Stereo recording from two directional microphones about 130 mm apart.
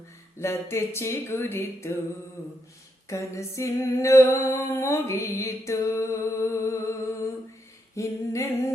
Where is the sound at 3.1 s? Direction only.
25° left (ahead or behind).